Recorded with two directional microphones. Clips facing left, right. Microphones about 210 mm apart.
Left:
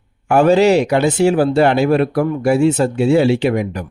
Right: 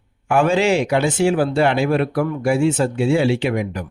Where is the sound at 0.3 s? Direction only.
40° left (ahead or behind).